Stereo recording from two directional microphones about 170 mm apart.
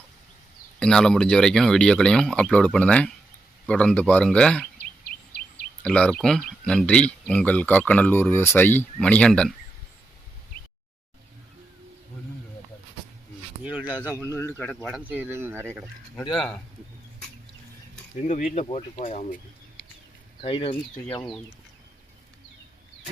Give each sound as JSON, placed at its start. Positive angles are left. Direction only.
{"t": 0.8, "sound": "speech", "side_deg": 5}
{"t": 5.8, "sound": "speech", "side_deg": 5}
{"t": 13.7, "sound": "speech", "side_deg": -10}
{"t": 14.3, "sound": "speech", "side_deg": 15}
{"t": 14.8, "sound": "speech", "side_deg": -5}
{"t": 16.3, "sound": "speech", "side_deg": 0}
{"t": 18.3, "sound": "speech", "side_deg": 50}
{"t": 18.6, "sound": "speech", "side_deg": 35}
{"t": 19.0, "sound": "speech", "side_deg": 45}
{"t": 20.4, "sound": "speech", "side_deg": 35}